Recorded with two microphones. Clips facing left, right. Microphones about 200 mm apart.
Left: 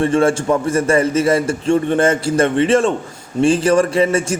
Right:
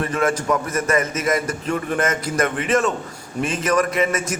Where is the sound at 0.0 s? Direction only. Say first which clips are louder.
Left 7 dB; 30° left (ahead or behind).